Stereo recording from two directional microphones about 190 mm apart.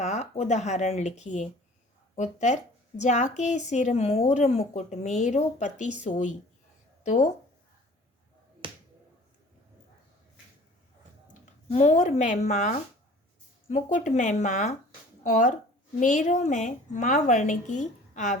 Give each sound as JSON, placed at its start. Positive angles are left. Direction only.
{"t": 0.0, "sound": "speech", "side_deg": 35}
{"t": 11.7, "sound": "speech", "side_deg": 40}